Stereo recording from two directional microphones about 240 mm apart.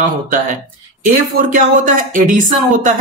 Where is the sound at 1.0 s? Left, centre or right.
Right.